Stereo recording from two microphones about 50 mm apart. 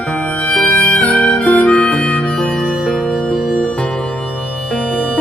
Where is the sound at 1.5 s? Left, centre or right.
Left.